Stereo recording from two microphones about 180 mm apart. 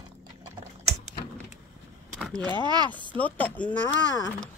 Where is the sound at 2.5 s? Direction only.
25° right (ahead or behind).